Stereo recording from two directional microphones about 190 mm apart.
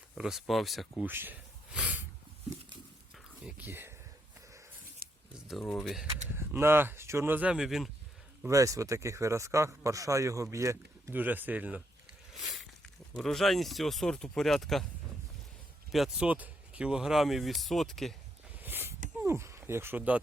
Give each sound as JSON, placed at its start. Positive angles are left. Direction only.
{"t": 0.2, "sound": "speech", "side_deg": 0}
{"t": 1.0, "sound": "a sound", "side_deg": -10}
{"t": 3.4, "sound": "a man's voice", "side_deg": -10}
{"t": 5.3, "sound": "speech", "side_deg": 0}
{"t": 6.3, "sound": "a man's voice", "side_deg": -10}
{"t": 8.4, "sound": "a man's voice", "side_deg": -15}
{"t": 13.1, "sound": "speech", "side_deg": 0}
{"t": 15.9, "sound": "speech", "side_deg": 0}
{"t": 18.6, "sound": "a sound", "side_deg": -10}
{"t": 19.2, "sound": "speech", "side_deg": -15}